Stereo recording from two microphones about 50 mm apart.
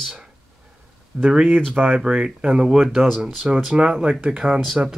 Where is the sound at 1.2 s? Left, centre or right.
Centre.